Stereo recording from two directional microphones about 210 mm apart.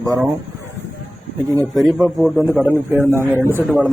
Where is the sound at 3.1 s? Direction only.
10° right (ahead or behind).